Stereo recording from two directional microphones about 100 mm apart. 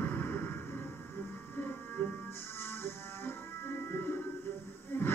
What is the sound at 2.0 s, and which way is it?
Music, 20° left (ahead or behind).